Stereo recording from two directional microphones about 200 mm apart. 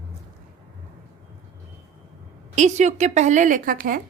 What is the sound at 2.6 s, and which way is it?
A woman's voice, 35° right (ahead or behind).